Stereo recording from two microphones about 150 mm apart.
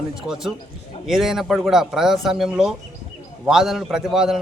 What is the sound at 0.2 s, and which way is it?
A man's voice, centre (ahead or behind).